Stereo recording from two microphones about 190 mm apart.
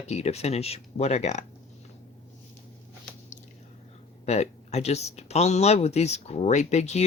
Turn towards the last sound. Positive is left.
turn(degrees=35)  # may be behind; listen again after turning